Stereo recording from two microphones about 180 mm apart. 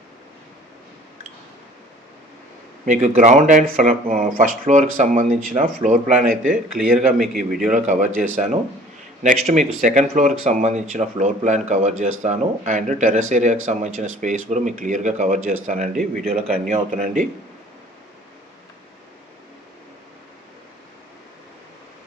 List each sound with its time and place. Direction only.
2.8 s speech: 45° right (ahead or behind)
6.8 s a man's voice: 5° right (ahead or behind)
7.7 s speech: 45° right (ahead or behind)